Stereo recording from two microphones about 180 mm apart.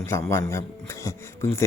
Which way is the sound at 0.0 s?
15° left (ahead or behind).